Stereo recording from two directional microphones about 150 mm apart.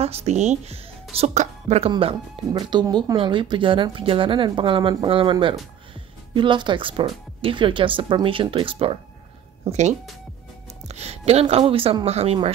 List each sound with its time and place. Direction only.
0.0 s a woman's voice: 45° right (ahead or behind)
1.9 s speech: 40° right (ahead or behind)
2.5 s speech: 30° right (ahead or behind)
9.7 s a woman's voice: 50° right (ahead or behind)